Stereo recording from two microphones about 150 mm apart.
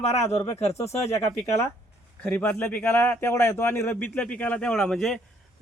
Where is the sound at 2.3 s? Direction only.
10° left (ahead or behind).